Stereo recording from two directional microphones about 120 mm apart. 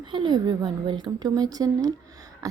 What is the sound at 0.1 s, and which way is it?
A woman's voice, 40° right (ahead or behind).